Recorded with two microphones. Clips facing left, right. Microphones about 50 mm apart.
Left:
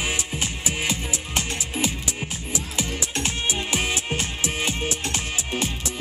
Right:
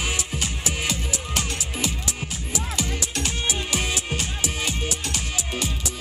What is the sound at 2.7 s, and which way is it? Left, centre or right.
Music, left.